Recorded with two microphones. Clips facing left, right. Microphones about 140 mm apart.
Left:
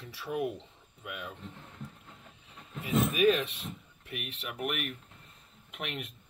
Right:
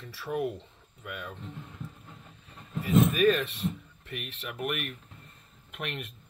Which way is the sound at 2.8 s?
10° left (ahead or behind).